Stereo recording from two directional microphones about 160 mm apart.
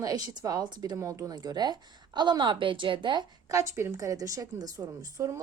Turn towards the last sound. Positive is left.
turn(degrees=-20)  # may be behind; listen again after turning